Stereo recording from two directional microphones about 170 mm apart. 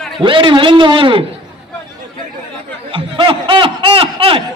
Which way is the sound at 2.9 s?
30° right (ahead or behind).